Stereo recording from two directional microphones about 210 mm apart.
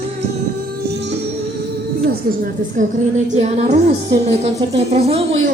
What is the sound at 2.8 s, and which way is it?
A woman's voice, 35° right (ahead or behind).